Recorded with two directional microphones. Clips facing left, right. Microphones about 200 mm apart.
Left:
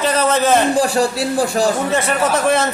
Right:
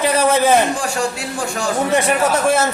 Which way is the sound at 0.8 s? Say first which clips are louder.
Left 6 dB; 35° left (ahead or behind).